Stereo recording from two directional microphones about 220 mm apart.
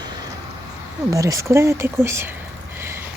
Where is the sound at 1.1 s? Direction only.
15° right (ahead or behind).